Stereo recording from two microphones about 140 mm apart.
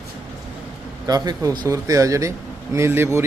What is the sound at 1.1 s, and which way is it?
Speech, 30° right (ahead or behind).